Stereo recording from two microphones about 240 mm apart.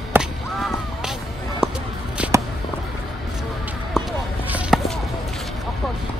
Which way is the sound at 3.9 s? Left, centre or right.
Centre.